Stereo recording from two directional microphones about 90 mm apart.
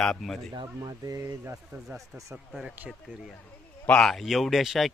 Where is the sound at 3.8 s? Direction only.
10° left (ahead or behind).